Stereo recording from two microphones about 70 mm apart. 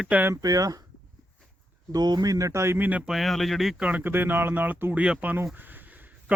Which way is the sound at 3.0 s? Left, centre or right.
Centre.